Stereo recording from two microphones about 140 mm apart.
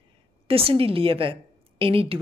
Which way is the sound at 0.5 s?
40° right (ahead or behind).